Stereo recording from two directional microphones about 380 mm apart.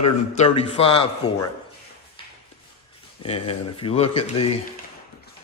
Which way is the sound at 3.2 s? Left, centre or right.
Centre.